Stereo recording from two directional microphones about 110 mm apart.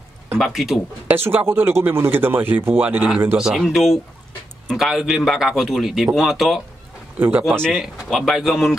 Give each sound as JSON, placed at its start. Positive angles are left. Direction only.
{"t": 0.4, "sound": "a man's voice", "side_deg": 0}
{"t": 1.0, "sound": "speech", "side_deg": -20}
{"t": 3.4, "sound": "a man's voice", "side_deg": -5}
{"t": 7.2, "sound": "speech", "side_deg": -20}
{"t": 7.6, "sound": "a man's voice", "side_deg": 0}